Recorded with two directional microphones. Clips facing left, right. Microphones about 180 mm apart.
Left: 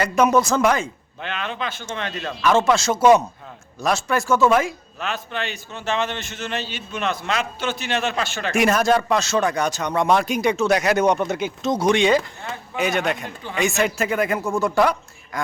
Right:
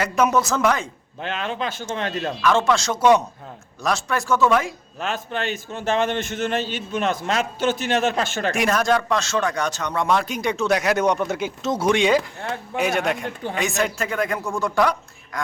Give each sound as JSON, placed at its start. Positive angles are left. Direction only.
{"t": 0.0, "sound": "a man's voice", "side_deg": 0}
{"t": 1.2, "sound": "speech", "side_deg": -40}
{"t": 2.4, "sound": "a man's voice", "side_deg": 5}
{"t": 4.9, "sound": "a man's voice", "side_deg": -45}
{"t": 8.5, "sound": "a man's voice", "side_deg": 5}